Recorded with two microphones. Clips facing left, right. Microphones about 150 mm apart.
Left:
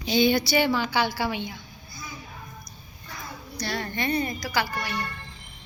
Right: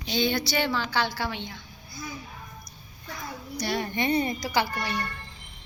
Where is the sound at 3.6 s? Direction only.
15° right (ahead or behind).